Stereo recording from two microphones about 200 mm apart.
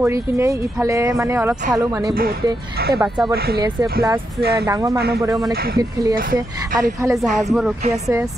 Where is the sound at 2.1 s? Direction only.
45° right (ahead or behind).